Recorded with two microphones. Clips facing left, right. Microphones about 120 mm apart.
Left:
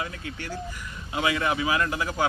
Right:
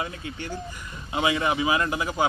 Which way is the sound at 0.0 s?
25° right (ahead or behind).